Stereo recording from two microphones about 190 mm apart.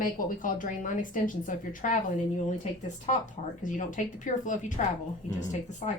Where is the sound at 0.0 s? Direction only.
45° left (ahead or behind).